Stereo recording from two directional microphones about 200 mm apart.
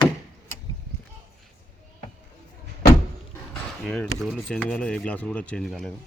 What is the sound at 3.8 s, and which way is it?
Speech, centre (ahead or behind).